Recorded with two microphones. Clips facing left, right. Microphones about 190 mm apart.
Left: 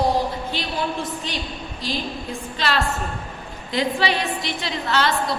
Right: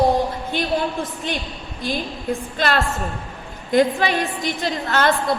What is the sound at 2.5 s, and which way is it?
A woman's voice, 50° right (ahead or behind).